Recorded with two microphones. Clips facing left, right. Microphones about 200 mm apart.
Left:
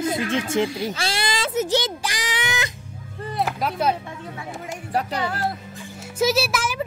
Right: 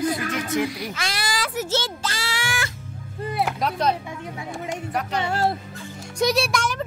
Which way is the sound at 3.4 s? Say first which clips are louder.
Left 1 dB; 5° left (ahead or behind).